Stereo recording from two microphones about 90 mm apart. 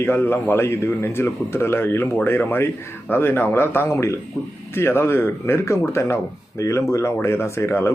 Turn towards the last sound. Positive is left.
turn(degrees=30)  # may be behind; listen again after turning